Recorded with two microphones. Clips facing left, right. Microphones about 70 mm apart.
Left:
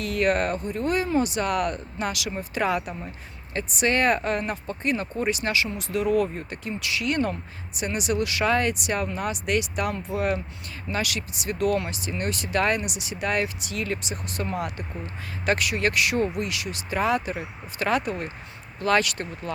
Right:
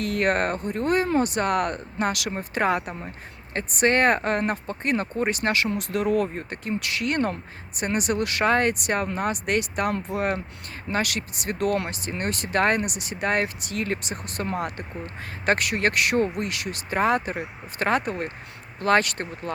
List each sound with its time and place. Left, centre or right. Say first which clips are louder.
0.0 s speech: even; right